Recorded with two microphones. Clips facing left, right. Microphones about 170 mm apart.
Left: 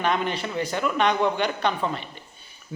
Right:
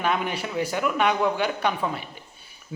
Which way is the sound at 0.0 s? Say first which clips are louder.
Left 1 dB; 10° right (ahead or behind).